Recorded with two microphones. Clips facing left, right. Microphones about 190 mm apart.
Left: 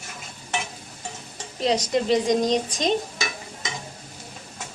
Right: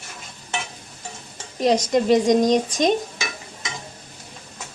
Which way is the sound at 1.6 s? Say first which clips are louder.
Right 4 dB; 50° right (ahead or behind).